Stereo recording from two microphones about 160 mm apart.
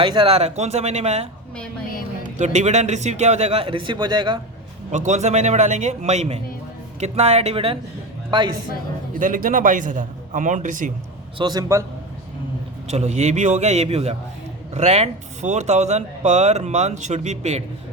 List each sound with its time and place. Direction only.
0.0 s speech: 30° right (ahead or behind)
2.4 s speech: 45° right (ahead or behind); by 4.4 s 25° right (ahead or behind)
4.9 s speech: 45° right (ahead or behind)
9.1 s a man's voice: 55° right (ahead or behind)
11.3 s a man's voice: 25° right (ahead or behind)
12.9 s speech: 45° right (ahead or behind)